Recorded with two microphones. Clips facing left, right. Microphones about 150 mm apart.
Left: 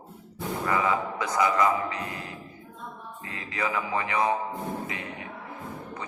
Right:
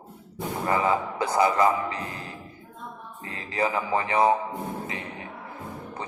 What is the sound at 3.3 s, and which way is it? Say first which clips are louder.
A man's voice: right 4 dB; 30° right (ahead or behind).